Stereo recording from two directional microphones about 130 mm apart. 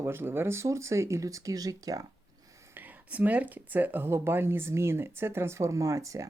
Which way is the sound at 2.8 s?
10° right (ahead or behind).